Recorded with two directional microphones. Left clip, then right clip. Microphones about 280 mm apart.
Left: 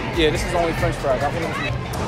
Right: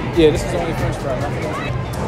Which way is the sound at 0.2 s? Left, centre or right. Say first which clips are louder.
Right 6 dB; centre.